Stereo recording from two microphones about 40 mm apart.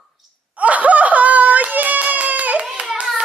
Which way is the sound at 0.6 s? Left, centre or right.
Right.